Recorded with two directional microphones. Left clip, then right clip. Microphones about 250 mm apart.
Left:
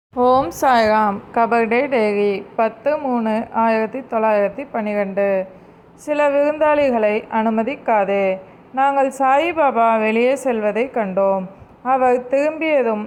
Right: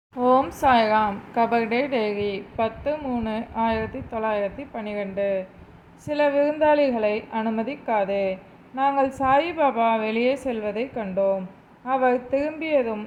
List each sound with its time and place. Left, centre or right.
0.2 s a woman's voice: left
2.0 s a woman's voice: left
2.6 s a woman's voice: left